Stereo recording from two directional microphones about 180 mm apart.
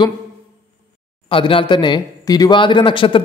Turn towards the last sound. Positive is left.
turn(degrees=30)  # may be behind; listen again after turning